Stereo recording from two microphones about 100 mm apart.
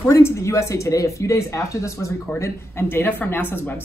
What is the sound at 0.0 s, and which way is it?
Speech, 25° left (ahead or behind).